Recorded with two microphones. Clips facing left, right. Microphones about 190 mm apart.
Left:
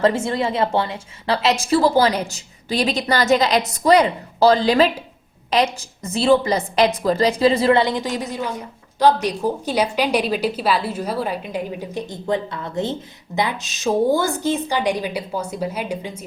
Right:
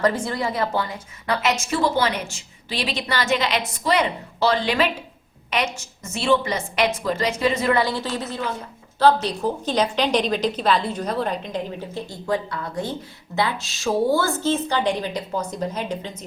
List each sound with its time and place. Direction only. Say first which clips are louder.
0.0 s a woman's voice: left 3 dB; 25° left (ahead or behind)